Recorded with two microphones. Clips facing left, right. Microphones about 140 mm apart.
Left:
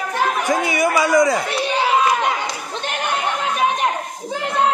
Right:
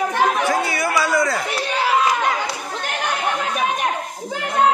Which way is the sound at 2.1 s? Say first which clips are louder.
Left 1 dB; 25° left (ahead or behind).